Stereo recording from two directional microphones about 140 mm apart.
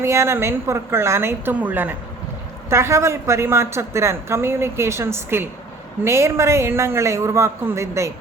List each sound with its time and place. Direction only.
0.0 s a woman's voice: 20° right (ahead or behind)